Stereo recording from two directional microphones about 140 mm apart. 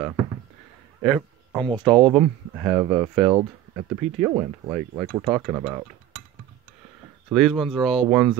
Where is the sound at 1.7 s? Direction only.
30° right (ahead or behind).